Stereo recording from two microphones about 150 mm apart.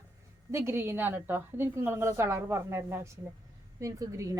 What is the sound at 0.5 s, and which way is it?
A woman's voice, 15° right (ahead or behind).